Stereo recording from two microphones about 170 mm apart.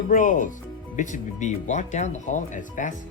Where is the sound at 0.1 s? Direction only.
50° left (ahead or behind).